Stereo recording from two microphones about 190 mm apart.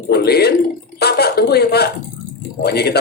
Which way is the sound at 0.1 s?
55° left (ahead or behind).